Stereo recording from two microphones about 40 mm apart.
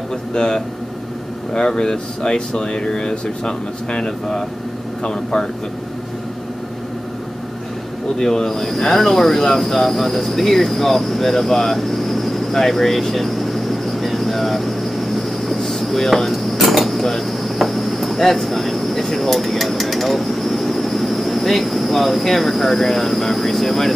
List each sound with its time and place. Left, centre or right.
0.3 s speech: left
8.2 s speech: centre